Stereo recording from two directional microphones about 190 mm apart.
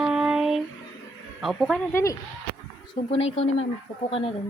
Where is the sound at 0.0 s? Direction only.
5° right (ahead or behind).